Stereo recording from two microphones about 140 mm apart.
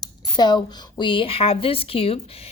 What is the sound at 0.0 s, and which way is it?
A woman's voice, 30° left (ahead or behind).